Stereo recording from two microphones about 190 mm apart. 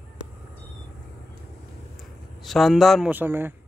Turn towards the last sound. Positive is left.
turn(degrees=-10)  # may be behind; listen again after turning